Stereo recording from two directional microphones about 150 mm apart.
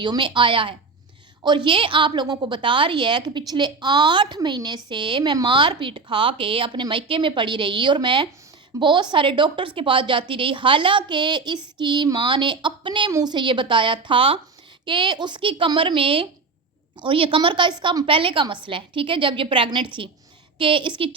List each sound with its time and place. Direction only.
0.0 s a woman's voice: 30° right (ahead or behind)